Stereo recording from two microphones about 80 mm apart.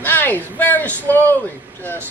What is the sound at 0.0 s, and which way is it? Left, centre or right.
Speech, left.